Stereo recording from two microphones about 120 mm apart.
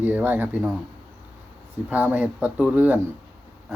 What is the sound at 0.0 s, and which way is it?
Speech, 15° right (ahead or behind).